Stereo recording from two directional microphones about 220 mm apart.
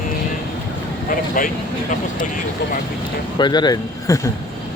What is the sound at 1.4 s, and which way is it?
Speech, 40° left (ahead or behind).